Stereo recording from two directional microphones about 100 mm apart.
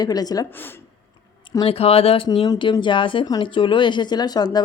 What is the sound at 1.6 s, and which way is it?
Speech, 80° left.